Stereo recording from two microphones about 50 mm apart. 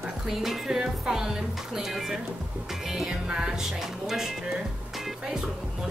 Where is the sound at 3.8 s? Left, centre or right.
Centre.